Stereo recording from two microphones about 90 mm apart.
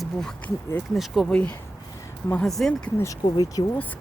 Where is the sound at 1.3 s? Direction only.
15° left (ahead or behind).